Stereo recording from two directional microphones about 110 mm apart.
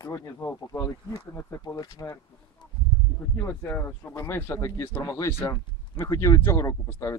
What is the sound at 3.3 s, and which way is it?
Speech, 20° left (ahead or behind).